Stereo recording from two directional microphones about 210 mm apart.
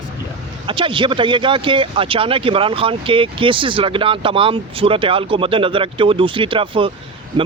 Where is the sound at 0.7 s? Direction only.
25° right (ahead or behind).